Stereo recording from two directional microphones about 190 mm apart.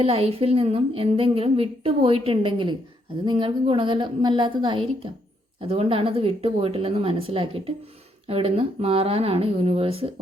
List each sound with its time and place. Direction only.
0.0 s a woman's voice: 30° right (ahead or behind)